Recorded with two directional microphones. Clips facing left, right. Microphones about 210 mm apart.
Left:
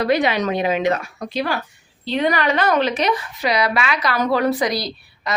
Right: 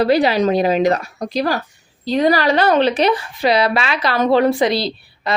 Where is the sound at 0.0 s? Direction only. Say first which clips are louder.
Right 4 dB; 35° right (ahead or behind).